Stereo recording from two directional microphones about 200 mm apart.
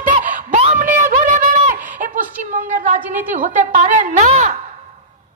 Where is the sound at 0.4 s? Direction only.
40° right (ahead or behind).